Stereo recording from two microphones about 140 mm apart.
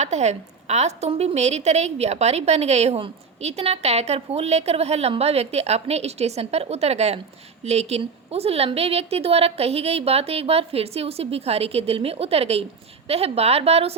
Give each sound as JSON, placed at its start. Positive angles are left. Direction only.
{"t": 0.0, "sound": "a woman's voice", "side_deg": -55}